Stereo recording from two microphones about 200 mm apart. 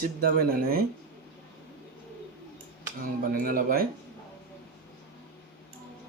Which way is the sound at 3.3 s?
45° right (ahead or behind).